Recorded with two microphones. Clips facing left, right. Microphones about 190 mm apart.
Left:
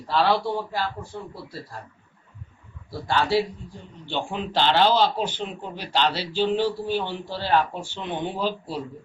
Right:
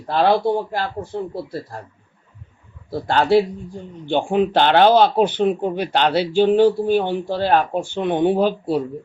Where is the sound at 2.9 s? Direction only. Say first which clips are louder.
Right 7 dB; 55° right (ahead or behind).